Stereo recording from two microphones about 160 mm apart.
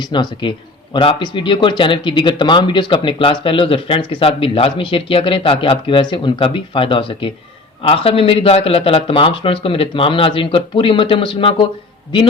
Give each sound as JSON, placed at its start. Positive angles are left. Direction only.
{"t": 0.0, "sound": "a man's voice", "side_deg": 30}